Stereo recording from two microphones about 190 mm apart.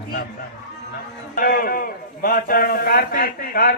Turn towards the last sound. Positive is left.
turn(degrees=50)  # may be behind; listen again after turning